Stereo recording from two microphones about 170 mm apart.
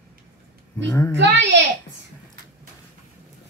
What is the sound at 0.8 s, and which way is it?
Speech, 20° left (ahead or behind).